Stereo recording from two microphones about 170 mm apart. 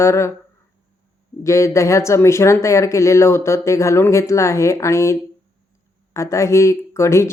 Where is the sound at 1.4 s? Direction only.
15° left (ahead or behind).